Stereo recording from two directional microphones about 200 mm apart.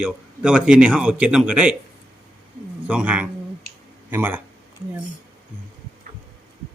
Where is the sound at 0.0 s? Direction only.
5° right (ahead or behind).